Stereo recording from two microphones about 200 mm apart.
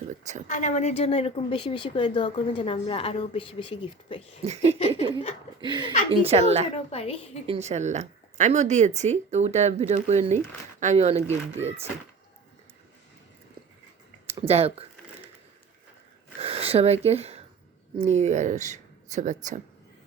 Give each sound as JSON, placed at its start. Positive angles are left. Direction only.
{"t": 0.4, "sound": "a woman's voice", "side_deg": 40}
{"t": 4.4, "sound": "a woman's voice", "side_deg": -35}
{"t": 6.7, "sound": "a woman's voice", "side_deg": 30}
{"t": 7.4, "sound": "a woman's voice", "side_deg": -30}
{"t": 14.3, "sound": "speech", "side_deg": -30}
{"t": 16.4, "sound": "speech", "side_deg": -30}